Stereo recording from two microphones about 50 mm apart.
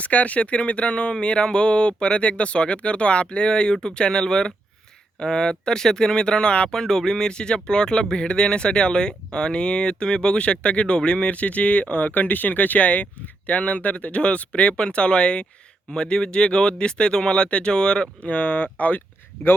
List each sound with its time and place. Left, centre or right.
0.0 s speech: left
18.3 s speech: left